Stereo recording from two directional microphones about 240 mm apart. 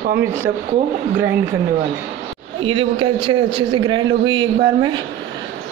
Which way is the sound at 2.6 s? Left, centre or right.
Right.